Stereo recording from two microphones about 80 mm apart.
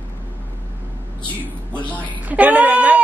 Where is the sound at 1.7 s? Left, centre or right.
Centre.